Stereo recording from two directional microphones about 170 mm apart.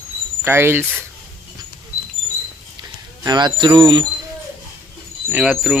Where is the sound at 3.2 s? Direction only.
25° right (ahead or behind).